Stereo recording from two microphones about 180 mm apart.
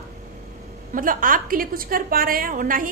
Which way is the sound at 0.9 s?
50° right (ahead or behind).